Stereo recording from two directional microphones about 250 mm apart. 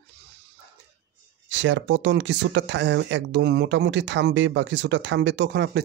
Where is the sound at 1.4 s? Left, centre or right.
Right.